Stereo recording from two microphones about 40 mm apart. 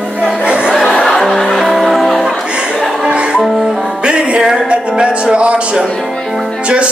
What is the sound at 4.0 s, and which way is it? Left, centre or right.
Music, right.